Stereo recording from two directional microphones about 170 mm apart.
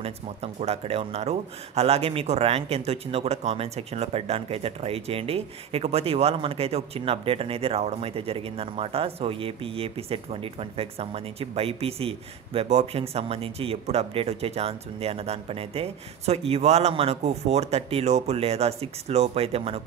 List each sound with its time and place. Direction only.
0.0 s speech: 40° right (ahead or behind)